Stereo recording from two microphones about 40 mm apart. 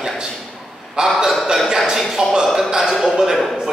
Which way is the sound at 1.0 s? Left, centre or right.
Centre.